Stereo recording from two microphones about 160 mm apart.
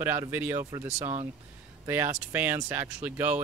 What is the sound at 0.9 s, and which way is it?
Speech, 45° right (ahead or behind).